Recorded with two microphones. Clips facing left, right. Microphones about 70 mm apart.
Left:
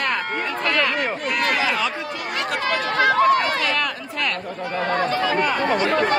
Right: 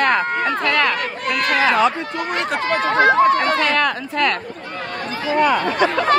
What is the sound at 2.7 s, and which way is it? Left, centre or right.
Speech, right.